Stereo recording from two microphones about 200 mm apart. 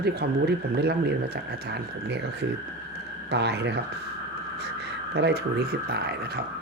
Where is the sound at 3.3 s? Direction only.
55° right (ahead or behind).